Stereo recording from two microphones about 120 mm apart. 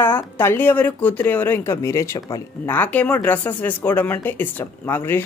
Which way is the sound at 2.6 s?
15° left (ahead or behind).